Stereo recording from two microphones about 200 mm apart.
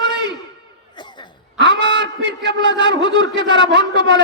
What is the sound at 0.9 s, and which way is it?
Cough, 20° left (ahead or behind).